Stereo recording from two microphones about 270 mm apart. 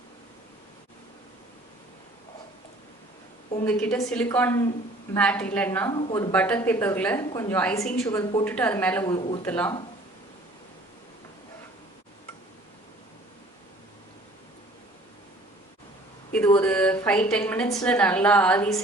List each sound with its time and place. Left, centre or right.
3.6 s a woman's voice: centre
6.0 s speech: centre
6.3 s a woman's voice: centre
9.1 s a woman's voice: centre
9.5 s a woman's voice: centre
16.3 s a woman's voice: centre